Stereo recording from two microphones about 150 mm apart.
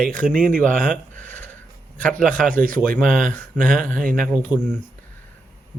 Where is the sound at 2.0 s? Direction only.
5° left (ahead or behind).